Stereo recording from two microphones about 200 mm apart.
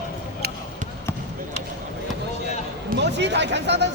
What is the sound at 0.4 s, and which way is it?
Basketball bounce, 55° right (ahead or behind).